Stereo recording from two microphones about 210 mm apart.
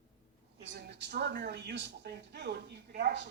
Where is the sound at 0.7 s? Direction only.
55° right (ahead or behind).